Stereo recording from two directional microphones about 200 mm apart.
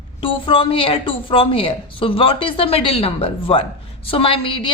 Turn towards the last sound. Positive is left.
turn(degrees=25)  # may be behind; listen again after turning